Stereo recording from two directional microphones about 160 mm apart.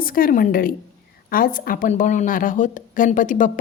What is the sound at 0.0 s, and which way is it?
A woman's voice, 60° left (ahead or behind).